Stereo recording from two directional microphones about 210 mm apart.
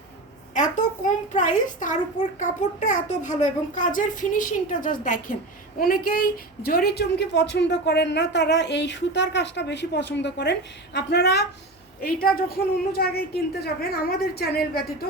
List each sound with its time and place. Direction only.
0.5 s a woman's voice: 35° left (ahead or behind)